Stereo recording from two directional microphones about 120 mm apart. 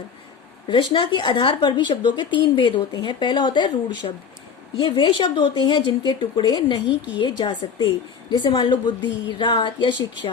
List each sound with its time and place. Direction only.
0.7 s a woman's voice: 35° left (ahead or behind)